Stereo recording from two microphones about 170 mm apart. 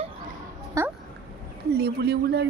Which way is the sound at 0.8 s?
20° right (ahead or behind).